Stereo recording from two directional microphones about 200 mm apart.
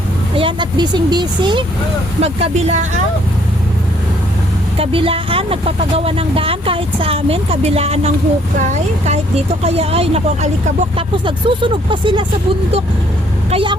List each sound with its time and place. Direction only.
0.3 s speech: 25° right (ahead or behind)
4.8 s speech: 25° right (ahead or behind)
13.5 s speech: 25° right (ahead or behind)